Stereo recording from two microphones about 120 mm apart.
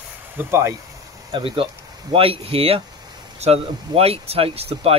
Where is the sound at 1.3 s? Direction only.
50° right (ahead or behind).